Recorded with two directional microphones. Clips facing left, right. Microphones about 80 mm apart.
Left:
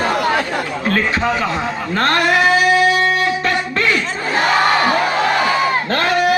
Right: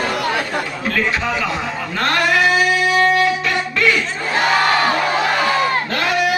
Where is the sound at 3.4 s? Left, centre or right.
Left.